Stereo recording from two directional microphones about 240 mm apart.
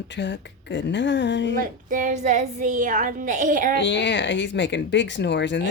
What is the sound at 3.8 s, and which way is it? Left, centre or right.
Speech, left.